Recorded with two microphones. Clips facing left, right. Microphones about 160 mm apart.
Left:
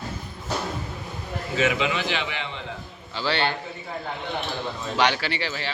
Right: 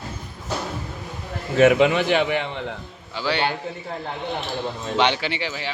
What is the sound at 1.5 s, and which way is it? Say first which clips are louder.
A man's voice: right 9 dB; 55° right (ahead or behind).